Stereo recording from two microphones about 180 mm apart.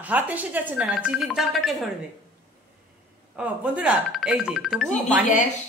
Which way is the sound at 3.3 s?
10° right (ahead or behind).